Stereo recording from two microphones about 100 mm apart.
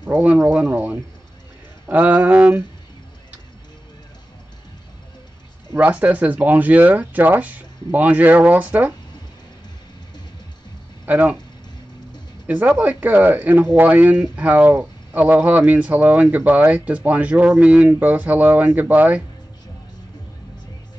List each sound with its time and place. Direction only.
0.0 s speech: 20° right (ahead or behind)
5.7 s speech: 15° right (ahead or behind)
11.1 s speech: 15° right (ahead or behind)
12.4 s speech: 15° right (ahead or behind)